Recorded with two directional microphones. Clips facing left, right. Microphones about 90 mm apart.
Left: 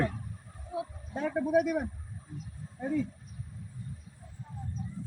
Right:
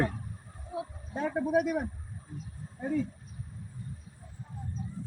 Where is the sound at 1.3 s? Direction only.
35° right (ahead or behind).